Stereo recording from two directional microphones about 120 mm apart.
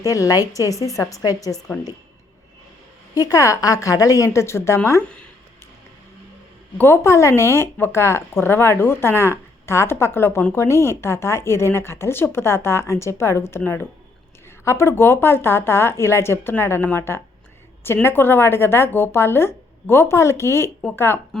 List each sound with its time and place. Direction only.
0.0 s speech: 30° left (ahead or behind)
1.5 s a woman's voice: 5° left (ahead or behind)
3.2 s speech: 30° left (ahead or behind)
6.7 s speech: 20° left (ahead or behind)
14.6 s speech: 25° left (ahead or behind)